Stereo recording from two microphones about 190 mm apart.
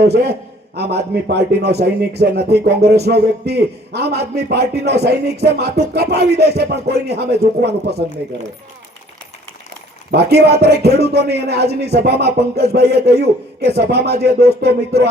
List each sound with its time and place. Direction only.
0.0 s a man's voice: 60° right (ahead or behind)
10.1 s a man's voice: 60° right (ahead or behind)